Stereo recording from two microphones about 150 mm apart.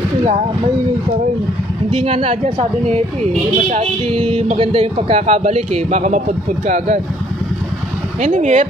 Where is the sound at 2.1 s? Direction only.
40° right (ahead or behind).